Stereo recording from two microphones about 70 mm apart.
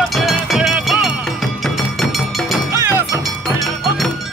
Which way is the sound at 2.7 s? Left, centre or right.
Right.